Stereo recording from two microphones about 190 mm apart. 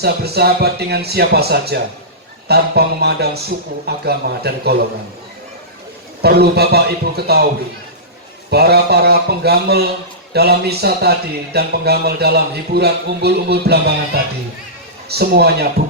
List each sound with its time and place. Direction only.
0.0 s speech: 55° right (ahead or behind)
6.2 s speech: 55° right (ahead or behind)
8.4 s speech: 60° right (ahead or behind)
15.1 s speech: 55° right (ahead or behind)